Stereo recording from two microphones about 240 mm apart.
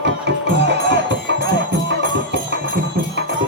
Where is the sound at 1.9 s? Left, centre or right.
Right.